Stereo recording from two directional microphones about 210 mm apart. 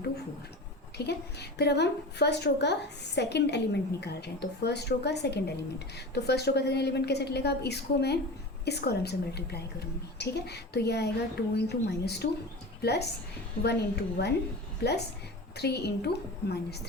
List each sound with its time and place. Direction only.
0.9 s a woman's voice: 50° left (ahead or behind)
15.5 s a woman's voice: 50° left (ahead or behind)